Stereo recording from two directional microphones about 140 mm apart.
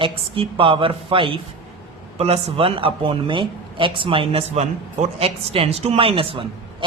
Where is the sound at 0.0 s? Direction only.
40° right (ahead or behind).